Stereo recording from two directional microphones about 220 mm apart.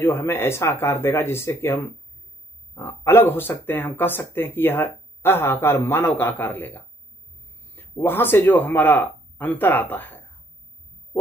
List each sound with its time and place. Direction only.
0.0 s speech: 10° left (ahead or behind)